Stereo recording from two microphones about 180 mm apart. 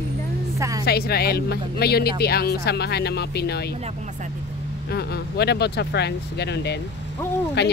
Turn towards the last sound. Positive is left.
turn(degrees=70)  # may be behind; listen again after turning